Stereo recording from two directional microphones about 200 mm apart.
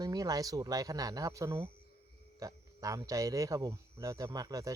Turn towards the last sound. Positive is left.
turn(degrees=-20)  # may be behind; listen again after turning